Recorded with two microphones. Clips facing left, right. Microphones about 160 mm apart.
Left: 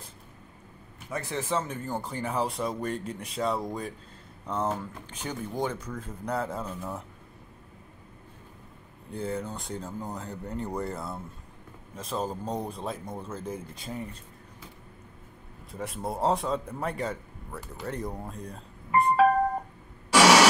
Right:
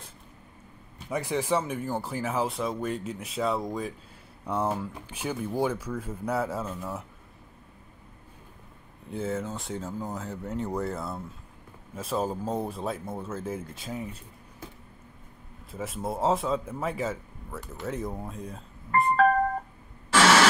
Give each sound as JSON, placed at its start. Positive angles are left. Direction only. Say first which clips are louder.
{"t": 1.1, "sound": "a man's voice", "louder": "right 3 dB", "side_deg": -15}
{"t": 9.1, "sound": "a man's voice", "louder": "right 2 dB", "side_deg": 0}
{"t": 15.7, "sound": "a man's voice", "louder": "right 1 dB", "side_deg": 0}
{"t": 18.9, "sound": "music", "louder": "left 1 dB", "side_deg": 10}
{"t": 20.1, "sound": "a sound", "louder": "left 2 dB", "side_deg": 10}